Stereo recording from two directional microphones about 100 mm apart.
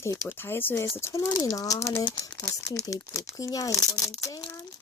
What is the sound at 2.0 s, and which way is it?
Speech, 50° left (ahead or behind).